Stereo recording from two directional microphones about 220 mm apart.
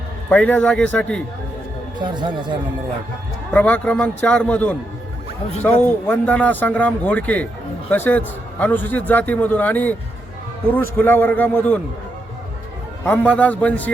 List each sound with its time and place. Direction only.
0.3 s a man's voice: 10° left (ahead or behind)
2.0 s speech: 20° right (ahead or behind)
3.5 s a man's voice: 5° left (ahead or behind)
13.1 s a man's voice: 5° left (ahead or behind)